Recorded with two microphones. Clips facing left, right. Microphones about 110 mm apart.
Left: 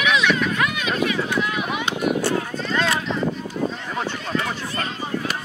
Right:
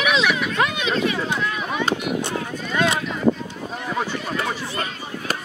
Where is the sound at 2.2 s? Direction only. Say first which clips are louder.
Left 3 dB; 20° right (ahead or behind).